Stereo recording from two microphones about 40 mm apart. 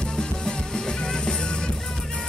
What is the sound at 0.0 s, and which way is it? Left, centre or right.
Music, centre.